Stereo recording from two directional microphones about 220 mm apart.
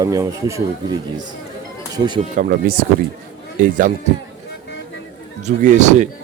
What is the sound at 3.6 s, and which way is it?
Speech, 35° right (ahead or behind).